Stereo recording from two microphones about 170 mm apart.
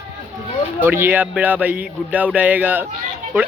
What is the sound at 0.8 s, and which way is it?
Speech, 10° right (ahead or behind).